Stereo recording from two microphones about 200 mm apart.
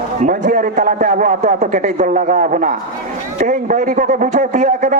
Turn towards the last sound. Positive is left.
turn(degrees=-40)  # may be behind; listen again after turning